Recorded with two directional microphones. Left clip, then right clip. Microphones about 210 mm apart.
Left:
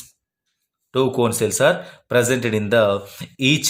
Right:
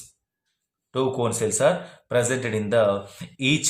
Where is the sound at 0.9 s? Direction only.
40° left (ahead or behind).